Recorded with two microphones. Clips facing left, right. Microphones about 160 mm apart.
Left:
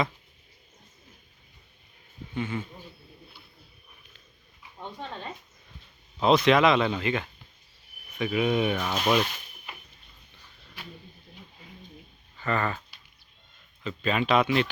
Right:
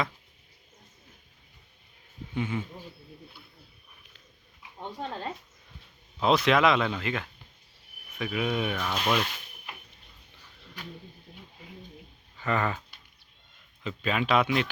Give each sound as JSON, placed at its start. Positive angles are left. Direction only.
{"t": 2.3, "sound": "speech", "side_deg": -15}
{"t": 6.1, "sound": "speech", "side_deg": 0}
{"t": 8.8, "sound": "speech", "side_deg": 15}
{"t": 12.4, "sound": "speech", "side_deg": -10}
{"t": 13.8, "sound": "speech", "side_deg": -5}